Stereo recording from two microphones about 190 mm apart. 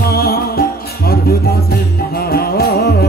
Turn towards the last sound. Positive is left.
turn(degrees=55)  # may be behind; listen again after turning